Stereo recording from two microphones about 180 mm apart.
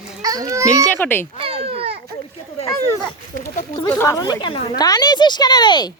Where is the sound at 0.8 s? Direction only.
10° left (ahead or behind).